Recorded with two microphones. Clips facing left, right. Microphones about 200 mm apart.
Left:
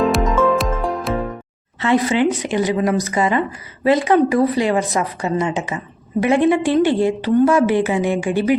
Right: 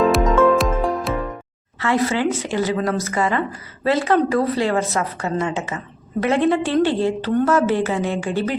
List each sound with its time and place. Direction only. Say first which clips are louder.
0.0 s music: right 1 dB; centre (ahead or behind)
1.8 s a woman's voice: left 3 dB; 20° left (ahead or behind)